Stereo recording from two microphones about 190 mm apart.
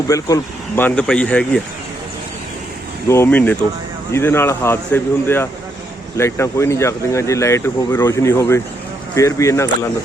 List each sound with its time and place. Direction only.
0.1 s speech: 15° left (ahead or behind)
3.1 s speech: 10° left (ahead or behind)